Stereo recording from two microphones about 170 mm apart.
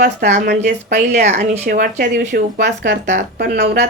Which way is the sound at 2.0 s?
70° right (ahead or behind).